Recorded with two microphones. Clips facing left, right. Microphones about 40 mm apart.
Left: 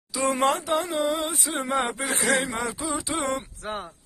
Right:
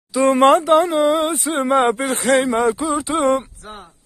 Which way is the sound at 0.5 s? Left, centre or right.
Right.